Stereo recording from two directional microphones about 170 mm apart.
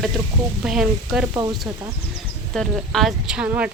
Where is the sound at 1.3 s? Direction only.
25° right (ahead or behind).